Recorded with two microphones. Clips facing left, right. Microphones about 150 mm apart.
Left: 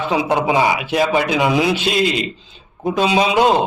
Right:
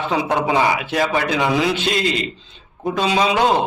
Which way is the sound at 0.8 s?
5° left (ahead or behind).